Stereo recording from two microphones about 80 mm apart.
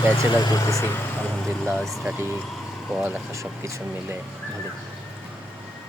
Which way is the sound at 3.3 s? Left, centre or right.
Right.